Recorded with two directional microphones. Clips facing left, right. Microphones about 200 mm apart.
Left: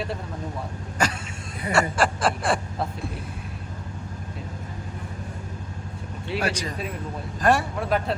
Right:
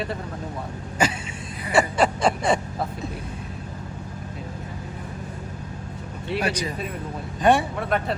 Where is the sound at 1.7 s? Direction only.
Centre (ahead or behind).